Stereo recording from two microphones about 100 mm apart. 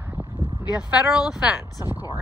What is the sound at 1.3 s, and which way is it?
Speech, 5° right (ahead or behind).